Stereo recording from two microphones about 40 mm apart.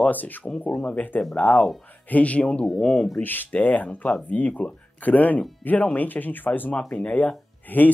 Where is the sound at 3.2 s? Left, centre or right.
Left.